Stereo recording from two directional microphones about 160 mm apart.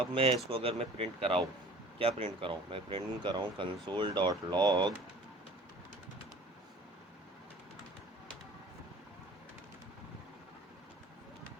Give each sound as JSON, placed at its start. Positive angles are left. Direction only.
{"t": 0.1, "sound": "speech", "side_deg": -35}